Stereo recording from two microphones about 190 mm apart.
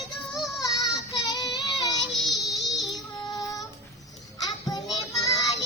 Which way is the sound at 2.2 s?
Centre (ahead or behind).